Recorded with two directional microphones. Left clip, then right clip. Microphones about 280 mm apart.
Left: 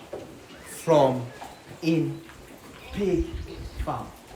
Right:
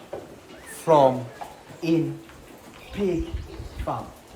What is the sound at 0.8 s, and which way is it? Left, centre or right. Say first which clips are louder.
A man's voice: right 3 dB; centre.